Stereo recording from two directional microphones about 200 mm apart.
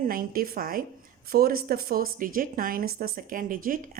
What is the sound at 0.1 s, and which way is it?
A woman's voice, 45° right (ahead or behind).